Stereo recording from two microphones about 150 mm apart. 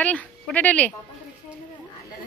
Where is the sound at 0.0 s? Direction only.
10° left (ahead or behind).